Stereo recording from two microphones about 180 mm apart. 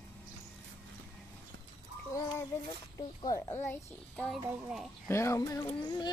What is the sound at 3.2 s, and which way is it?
A child's voice, 15° left (ahead or behind).